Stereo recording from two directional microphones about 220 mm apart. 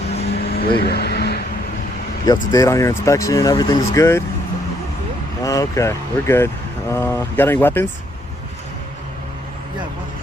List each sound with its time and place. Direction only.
0.3 s vehicle: 45° left (ahead or behind)
2.2 s speech: 15° left (ahead or behind)
5.4 s speech: 15° left (ahead or behind)